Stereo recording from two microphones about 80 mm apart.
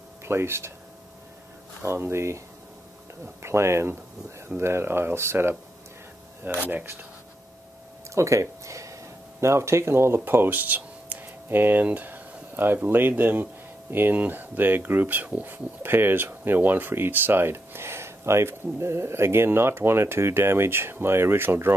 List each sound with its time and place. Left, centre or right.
0.2 s speech: right
1.8 s speech: right
3.4 s speech: right
6.6 s speech: right
8.1 s speech: right